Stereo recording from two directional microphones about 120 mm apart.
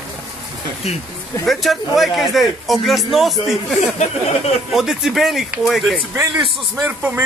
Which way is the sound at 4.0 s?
65° left (ahead or behind).